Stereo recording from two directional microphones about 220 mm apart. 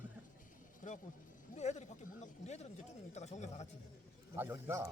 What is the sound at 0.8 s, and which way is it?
Speech, 35° left (ahead or behind).